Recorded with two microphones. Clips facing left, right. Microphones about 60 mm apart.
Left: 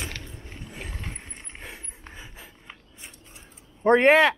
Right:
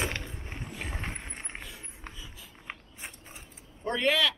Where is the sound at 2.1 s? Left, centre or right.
Left.